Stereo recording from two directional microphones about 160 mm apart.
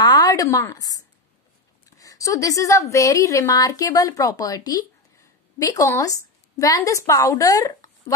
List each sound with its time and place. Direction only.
0.0 s a woman's voice: 25° left (ahead or behind)